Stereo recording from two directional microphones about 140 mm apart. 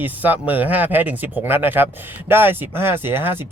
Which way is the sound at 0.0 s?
10° right (ahead or behind).